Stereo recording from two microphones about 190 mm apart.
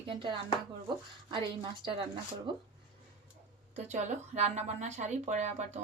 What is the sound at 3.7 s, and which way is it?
Speech, 40° right (ahead or behind).